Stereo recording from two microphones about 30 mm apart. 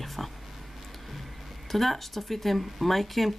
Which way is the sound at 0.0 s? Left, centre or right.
Centre.